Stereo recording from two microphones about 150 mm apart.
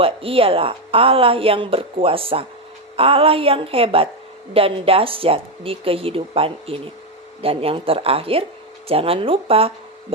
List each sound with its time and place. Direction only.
0.0 s speech: 40° right (ahead or behind)